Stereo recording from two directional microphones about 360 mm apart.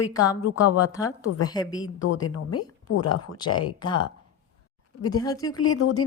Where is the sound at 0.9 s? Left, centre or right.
Centre.